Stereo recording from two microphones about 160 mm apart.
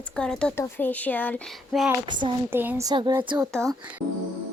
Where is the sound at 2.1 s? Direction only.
30° right (ahead or behind).